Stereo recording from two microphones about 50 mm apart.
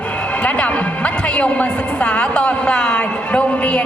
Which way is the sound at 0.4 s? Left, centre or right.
Left.